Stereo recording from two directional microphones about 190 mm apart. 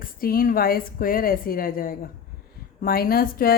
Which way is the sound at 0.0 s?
50° left (ahead or behind).